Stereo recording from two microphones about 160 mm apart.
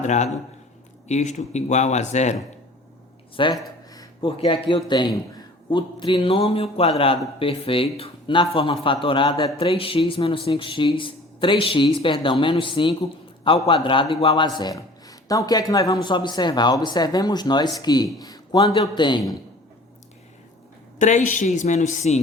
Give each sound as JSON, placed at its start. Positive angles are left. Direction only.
{"t": 0.0, "sound": "speech", "side_deg": 45}
{"t": 3.4, "sound": "a man's voice", "side_deg": 30}
{"t": 21.0, "sound": "speech", "side_deg": 50}